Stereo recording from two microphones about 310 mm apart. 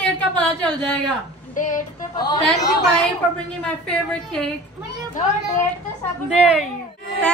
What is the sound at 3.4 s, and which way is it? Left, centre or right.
Speech, centre.